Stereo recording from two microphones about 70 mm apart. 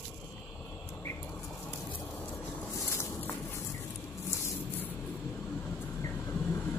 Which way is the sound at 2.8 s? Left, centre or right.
Left.